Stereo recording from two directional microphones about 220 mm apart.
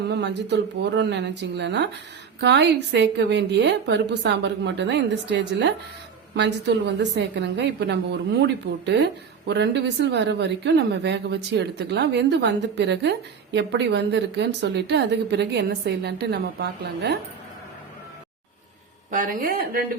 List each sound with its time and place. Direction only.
0.1 s a woman's voice: 50° right (ahead or behind)
8.9 s a woman's voice: 55° right (ahead or behind)
19.1 s speech: 35° right (ahead or behind)